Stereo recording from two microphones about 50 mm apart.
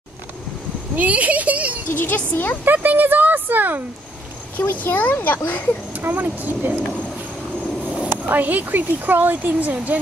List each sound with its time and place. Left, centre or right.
0.9 s speech: right
1.9 s speech: left
2.6 s speech: right
4.6 s speech: left
5.9 s speech: right
8.3 s speech: right